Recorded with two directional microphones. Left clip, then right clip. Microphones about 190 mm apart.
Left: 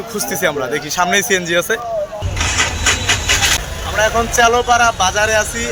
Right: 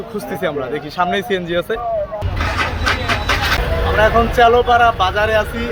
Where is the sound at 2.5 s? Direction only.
40° right (ahead or behind).